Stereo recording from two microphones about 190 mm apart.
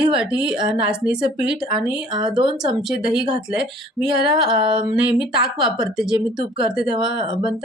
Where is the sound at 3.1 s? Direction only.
25° right (ahead or behind).